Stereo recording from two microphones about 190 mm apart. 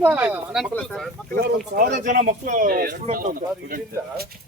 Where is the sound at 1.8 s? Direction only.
45° right (ahead or behind).